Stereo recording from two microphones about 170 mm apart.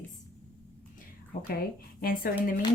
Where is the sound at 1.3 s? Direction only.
60° left (ahead or behind).